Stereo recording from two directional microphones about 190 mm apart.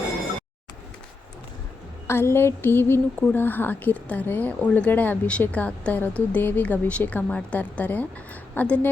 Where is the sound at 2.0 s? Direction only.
15° left (ahead or behind).